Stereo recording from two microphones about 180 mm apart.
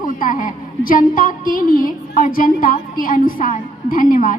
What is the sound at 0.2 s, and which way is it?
A woman's voice, 45° left (ahead or behind).